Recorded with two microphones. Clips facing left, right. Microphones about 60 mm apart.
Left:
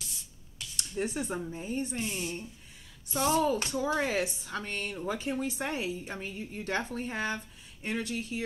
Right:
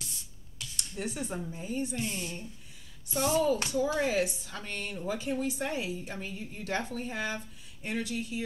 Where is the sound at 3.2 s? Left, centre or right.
Left.